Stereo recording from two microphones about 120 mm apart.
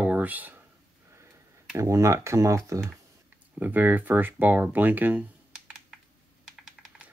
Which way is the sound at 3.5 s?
15° right (ahead or behind).